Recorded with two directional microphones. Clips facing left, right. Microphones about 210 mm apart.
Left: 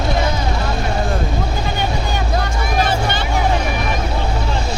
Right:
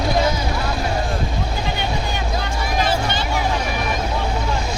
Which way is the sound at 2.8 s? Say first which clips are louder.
Left 2 dB; 55° left (ahead or behind).